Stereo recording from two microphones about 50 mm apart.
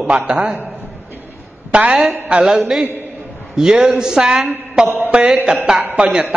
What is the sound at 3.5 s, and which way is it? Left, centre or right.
A woman's voice, centre.